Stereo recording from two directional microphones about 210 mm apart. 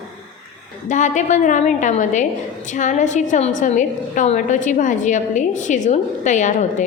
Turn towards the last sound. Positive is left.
turn(degrees=35)  # may be behind; listen again after turning